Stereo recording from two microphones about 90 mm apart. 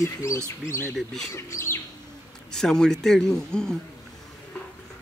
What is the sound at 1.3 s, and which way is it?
Speech, 30° left (ahead or behind).